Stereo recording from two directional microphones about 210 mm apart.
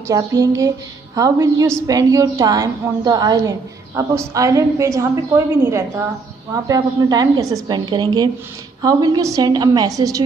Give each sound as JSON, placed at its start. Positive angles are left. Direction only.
{"t": 0.1, "sound": "a woman's voice", "side_deg": -15}